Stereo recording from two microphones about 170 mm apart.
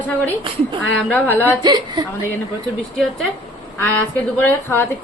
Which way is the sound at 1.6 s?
25° right (ahead or behind).